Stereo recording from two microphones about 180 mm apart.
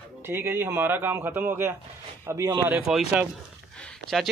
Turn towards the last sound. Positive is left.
turn(degrees=5)  # may be behind; listen again after turning